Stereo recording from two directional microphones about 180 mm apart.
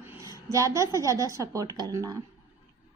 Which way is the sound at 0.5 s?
15° right (ahead or behind).